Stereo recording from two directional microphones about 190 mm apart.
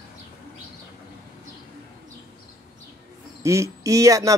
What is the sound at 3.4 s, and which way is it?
Speech, 15° right (ahead or behind).